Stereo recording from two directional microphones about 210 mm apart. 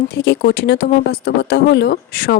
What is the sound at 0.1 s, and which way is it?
Speech, 50° left (ahead or behind).